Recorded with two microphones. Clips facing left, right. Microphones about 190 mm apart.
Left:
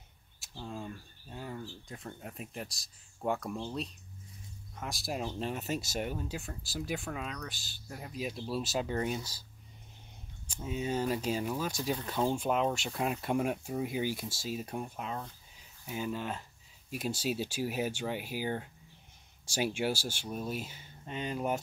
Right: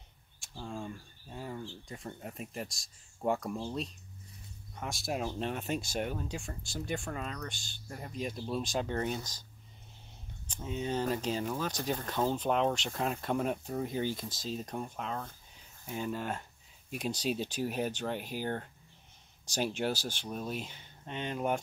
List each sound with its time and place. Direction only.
0.4 s speech: centre (ahead or behind)
10.4 s speech: 10° left (ahead or behind)
11.7 s speech: 45° right (ahead or behind)
12.1 s speech: 10° left (ahead or behind)